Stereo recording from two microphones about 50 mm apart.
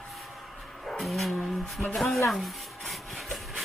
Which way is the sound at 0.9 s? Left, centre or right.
Centre.